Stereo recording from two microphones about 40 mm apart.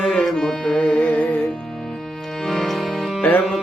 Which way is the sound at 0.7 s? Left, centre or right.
Left.